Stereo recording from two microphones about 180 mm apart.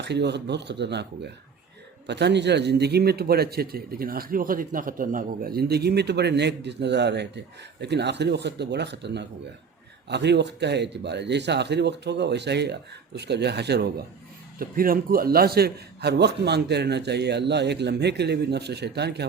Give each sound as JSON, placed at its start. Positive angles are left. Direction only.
{"t": 0.0, "sound": "a man's voice", "side_deg": -70}
{"t": 14.6, "sound": "a man's voice", "side_deg": -55}